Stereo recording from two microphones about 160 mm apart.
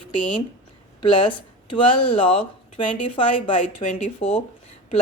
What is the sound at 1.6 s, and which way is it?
Speech, 35° left (ahead or behind).